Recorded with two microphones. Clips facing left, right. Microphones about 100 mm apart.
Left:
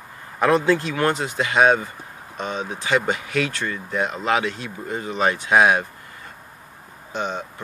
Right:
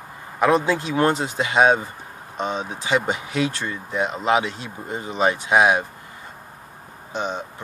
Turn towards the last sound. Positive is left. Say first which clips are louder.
# even
turn(degrees=-25)  # may be behind; listen again after turning